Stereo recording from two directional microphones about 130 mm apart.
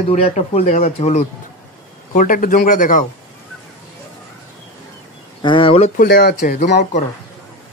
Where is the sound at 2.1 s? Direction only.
90° left.